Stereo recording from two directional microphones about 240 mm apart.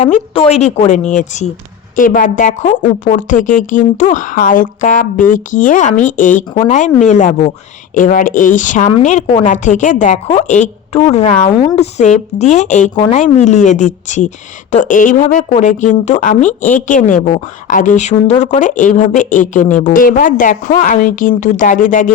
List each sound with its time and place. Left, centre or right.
0.0 s a woman's voice: left